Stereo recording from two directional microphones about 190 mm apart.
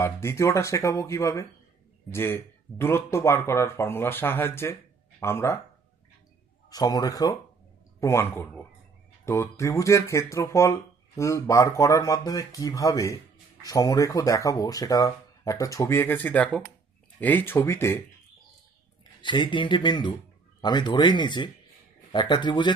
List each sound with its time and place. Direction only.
0.0 s speech: 15° left (ahead or behind)
6.7 s speech: 20° left (ahead or behind)
19.2 s speech: 25° left (ahead or behind)